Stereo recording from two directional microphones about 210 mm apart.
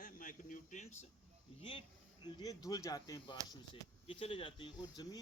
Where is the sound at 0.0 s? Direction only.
40° left (ahead or behind).